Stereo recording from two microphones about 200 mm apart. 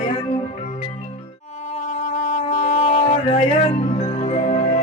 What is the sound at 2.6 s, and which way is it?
Music, 40° left (ahead or behind).